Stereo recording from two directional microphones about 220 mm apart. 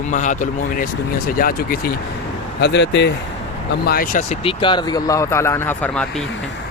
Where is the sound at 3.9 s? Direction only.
40° left (ahead or behind).